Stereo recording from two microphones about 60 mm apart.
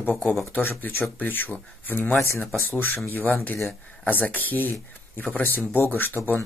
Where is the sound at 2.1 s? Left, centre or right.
Left.